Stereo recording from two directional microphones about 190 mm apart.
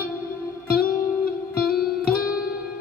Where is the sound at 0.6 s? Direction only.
50° left (ahead or behind).